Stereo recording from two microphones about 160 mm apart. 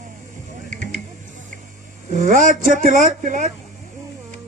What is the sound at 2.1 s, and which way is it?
Speech, 55° right (ahead or behind).